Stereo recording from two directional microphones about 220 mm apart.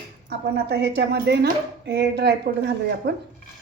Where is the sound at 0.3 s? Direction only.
50° right (ahead or behind).